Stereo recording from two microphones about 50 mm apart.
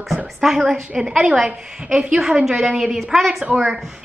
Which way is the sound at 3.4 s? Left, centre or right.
Right.